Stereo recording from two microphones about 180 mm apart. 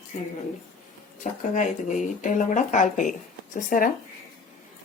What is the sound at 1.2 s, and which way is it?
Speech, 45° left (ahead or behind).